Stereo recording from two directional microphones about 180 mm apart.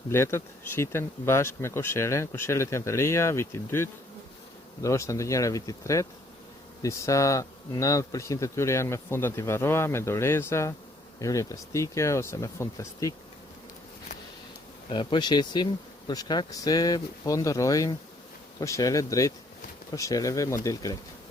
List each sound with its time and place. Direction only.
0.1 s speech: 15° left (ahead or behind)
14.8 s speech: 25° left (ahead or behind)